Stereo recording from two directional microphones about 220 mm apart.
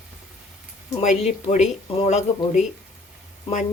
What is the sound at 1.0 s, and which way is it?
Speech, 30° left (ahead or behind).